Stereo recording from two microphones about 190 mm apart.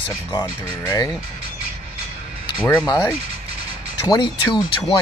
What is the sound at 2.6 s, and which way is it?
Speech, 10° left (ahead or behind).